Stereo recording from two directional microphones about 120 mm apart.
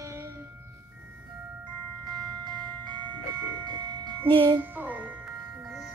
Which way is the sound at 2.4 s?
40° right (ahead or behind).